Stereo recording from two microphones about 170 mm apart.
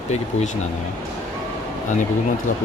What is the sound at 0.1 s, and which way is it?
Speech, 40° left (ahead or behind).